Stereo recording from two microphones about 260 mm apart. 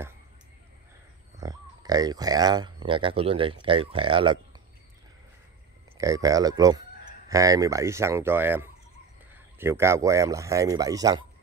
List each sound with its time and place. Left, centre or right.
1.4 s speech: centre
5.9 s speech: centre